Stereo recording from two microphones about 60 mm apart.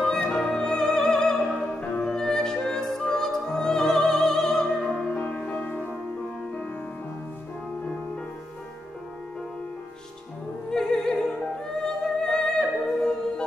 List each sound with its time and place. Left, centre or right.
0.0 s music: centre
5.1 s music: centre
10.7 s opera: centre
11.8 s music: centre